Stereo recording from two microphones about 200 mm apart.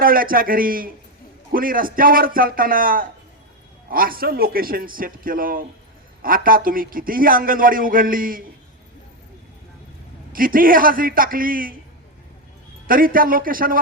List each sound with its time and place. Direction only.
0.0 s a man's voice: 45° right (ahead or behind)
10.3 s a man's voice: 45° right (ahead or behind)
12.9 s a man's voice: 45° right (ahead or behind)